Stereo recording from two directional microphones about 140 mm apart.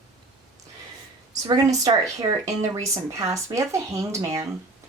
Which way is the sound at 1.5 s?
30° right (ahead or behind).